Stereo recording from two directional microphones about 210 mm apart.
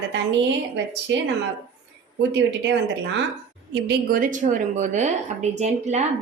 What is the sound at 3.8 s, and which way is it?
A woman's voice, 45° right (ahead or behind).